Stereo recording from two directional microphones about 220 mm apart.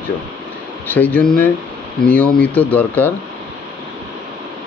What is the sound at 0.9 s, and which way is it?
Speech, 5° left (ahead or behind).